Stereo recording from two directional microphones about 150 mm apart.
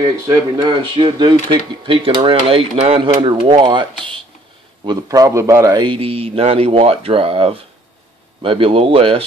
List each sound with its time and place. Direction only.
0.3 s a man's voice: 25° right (ahead or behind)